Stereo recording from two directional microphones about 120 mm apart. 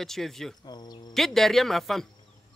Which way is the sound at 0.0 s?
5° left (ahead or behind).